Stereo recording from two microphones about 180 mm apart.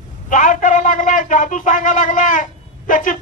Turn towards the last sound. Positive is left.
turn(degrees=45)  # may be behind; listen again after turning